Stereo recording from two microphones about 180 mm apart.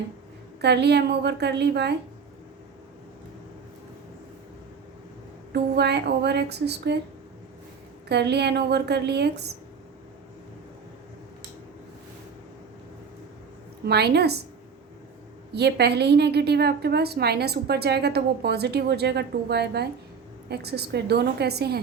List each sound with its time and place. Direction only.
0.6 s a woman's voice: 70° right (ahead or behind)
5.5 s a woman's voice: 70° right (ahead or behind)
8.1 s a woman's voice: 70° right (ahead or behind)
13.8 s a woman's voice: 65° right (ahead or behind)
15.5 s a woman's voice: 65° right (ahead or behind)